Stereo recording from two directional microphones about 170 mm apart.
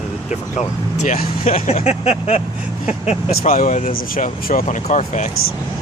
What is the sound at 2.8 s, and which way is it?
Speech, 45° left (ahead or behind).